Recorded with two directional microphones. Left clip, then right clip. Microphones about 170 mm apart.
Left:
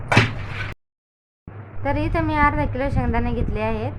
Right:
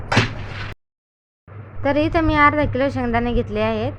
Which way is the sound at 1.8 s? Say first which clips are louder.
Right 5 dB; 20° right (ahead or behind).